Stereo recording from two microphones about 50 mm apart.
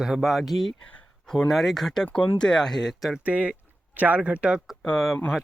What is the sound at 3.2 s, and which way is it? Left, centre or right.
Speech, right.